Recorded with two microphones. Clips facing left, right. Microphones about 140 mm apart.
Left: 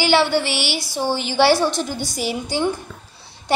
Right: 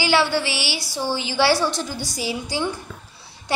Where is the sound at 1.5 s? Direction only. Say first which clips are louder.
Left 3 dB; 20° left (ahead or behind).